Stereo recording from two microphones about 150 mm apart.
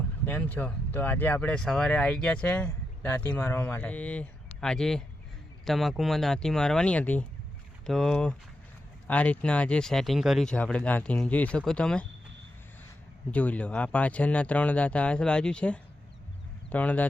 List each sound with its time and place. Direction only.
0.3 s speech: 10° left (ahead or behind)
13.3 s speech: 10° left (ahead or behind)